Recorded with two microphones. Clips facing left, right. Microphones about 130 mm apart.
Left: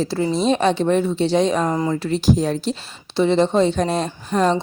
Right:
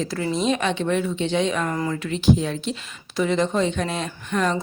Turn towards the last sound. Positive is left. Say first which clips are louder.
# left 5 dB
turn(degrees=35)  # may be behind; listen again after turning